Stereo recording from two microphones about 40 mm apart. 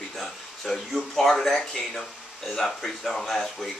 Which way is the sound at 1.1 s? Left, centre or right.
Centre.